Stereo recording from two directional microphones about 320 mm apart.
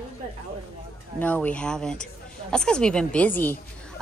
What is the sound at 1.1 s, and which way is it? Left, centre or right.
A woman's voice, centre.